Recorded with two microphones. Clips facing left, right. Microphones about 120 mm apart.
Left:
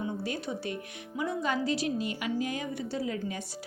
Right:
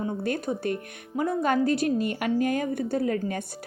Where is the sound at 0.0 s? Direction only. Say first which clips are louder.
Right 5 dB; 55° right (ahead or behind).